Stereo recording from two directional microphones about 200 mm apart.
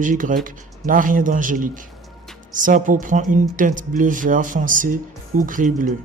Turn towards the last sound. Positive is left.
turn(degrees=-40)  # may be behind; listen again after turning